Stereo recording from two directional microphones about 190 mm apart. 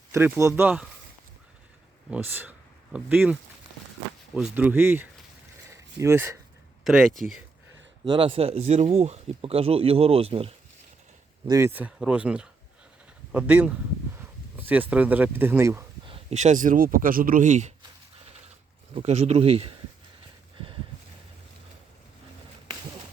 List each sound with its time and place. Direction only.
0.1 s speech: 15° right (ahead or behind)
2.0 s speech: 10° right (ahead or behind)
4.5 s speech: 10° right (ahead or behind)
5.7 s a sound: 15° right (ahead or behind)
6.8 s speech: centre (ahead or behind)
8.0 s speech: 25° right (ahead or behind)
11.4 s speech: 15° right (ahead or behind)
16.0 s speech: 35° right (ahead or behind)
18.9 s speech: 35° right (ahead or behind)
20.6 s a sound: 25° right (ahead or behind)